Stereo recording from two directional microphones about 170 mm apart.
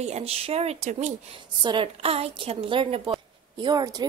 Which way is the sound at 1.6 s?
30° right (ahead or behind).